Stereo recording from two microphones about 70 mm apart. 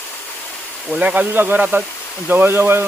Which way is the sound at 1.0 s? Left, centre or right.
Centre.